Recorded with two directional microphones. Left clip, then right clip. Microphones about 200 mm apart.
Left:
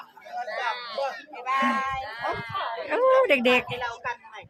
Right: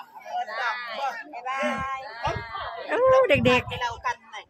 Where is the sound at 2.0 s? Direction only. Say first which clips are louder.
Even; 50° left (ahead or behind).